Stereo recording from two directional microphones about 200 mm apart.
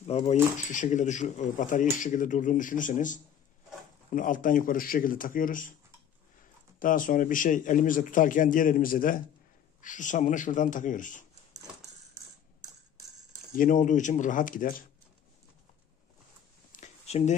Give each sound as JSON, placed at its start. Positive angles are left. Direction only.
{"t": 0.0, "sound": "a man's voice", "side_deg": 30}
{"t": 6.8, "sound": "a man's voice", "side_deg": 45}
{"t": 13.5, "sound": "speech", "side_deg": 40}
{"t": 16.7, "sound": "a sound", "side_deg": 35}